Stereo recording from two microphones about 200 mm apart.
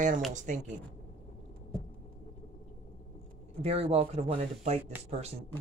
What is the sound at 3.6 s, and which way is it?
Speech, 30° right (ahead or behind).